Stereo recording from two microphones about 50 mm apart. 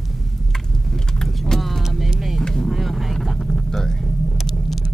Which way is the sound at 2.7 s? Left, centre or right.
Centre.